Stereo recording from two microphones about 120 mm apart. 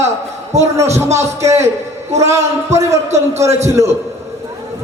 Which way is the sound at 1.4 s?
25° right (ahead or behind).